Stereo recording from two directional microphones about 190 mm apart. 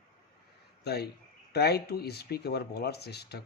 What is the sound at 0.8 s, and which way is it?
Speech, 60° left (ahead or behind).